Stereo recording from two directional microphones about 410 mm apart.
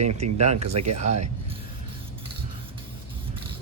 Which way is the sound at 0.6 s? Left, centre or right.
Right.